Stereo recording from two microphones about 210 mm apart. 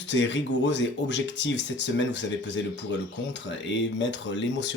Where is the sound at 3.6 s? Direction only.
60° left (ahead or behind).